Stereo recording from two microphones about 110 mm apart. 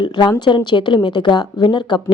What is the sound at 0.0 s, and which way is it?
A woman's voice, 40° left (ahead or behind).